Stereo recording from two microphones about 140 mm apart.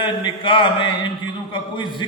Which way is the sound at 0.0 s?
35° left (ahead or behind).